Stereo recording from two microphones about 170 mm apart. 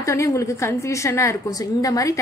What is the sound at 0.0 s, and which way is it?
A woman's voice, 15° left (ahead or behind).